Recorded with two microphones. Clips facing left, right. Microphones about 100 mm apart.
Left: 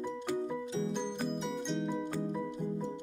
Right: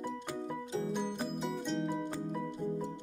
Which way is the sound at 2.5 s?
15° left (ahead or behind).